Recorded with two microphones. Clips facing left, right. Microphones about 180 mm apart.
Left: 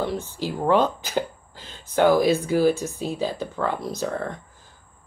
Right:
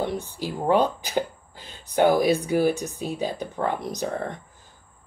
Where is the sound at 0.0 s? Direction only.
15° right (ahead or behind).